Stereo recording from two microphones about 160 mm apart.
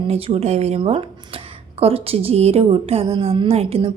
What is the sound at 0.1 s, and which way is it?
A woman's voice, 40° right (ahead or behind).